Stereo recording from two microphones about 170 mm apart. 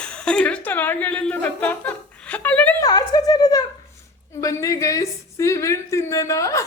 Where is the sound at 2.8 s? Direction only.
20° left (ahead or behind).